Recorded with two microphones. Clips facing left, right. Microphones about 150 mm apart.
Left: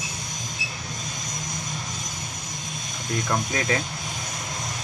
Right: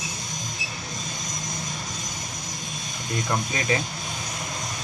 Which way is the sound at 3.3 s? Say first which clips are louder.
Even; 5° right (ahead or behind).